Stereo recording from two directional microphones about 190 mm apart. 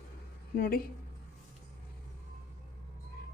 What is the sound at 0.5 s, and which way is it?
Speech, 50° left (ahead or behind).